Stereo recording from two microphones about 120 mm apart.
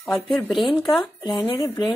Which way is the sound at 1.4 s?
45° left (ahead or behind).